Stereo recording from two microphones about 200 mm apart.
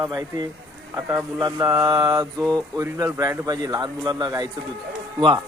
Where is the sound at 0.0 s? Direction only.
20° right (ahead or behind).